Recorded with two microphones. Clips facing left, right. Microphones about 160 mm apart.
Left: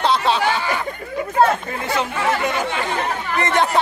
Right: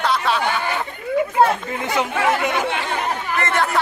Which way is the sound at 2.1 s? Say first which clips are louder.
Right 1 dB; 60° right (ahead or behind).